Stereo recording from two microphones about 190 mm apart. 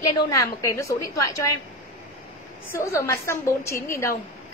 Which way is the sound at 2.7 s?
15° left (ahead or behind).